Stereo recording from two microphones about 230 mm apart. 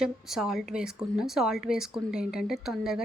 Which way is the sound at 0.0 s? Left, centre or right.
Centre.